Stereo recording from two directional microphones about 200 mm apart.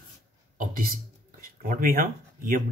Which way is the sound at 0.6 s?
45° right (ahead or behind).